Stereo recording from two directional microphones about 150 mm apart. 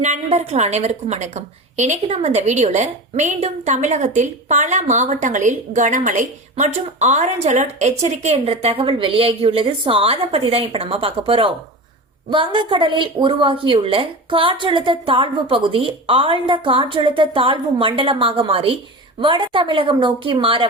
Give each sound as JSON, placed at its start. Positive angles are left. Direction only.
{"t": 0.0, "sound": "a woman's voice", "side_deg": -50}